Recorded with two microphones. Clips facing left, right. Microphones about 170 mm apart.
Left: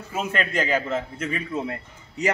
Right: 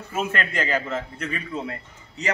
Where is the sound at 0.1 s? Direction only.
Centre (ahead or behind).